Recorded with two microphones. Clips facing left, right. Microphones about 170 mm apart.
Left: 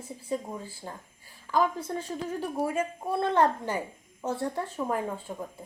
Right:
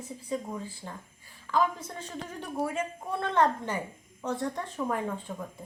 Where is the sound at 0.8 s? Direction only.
30° left (ahead or behind).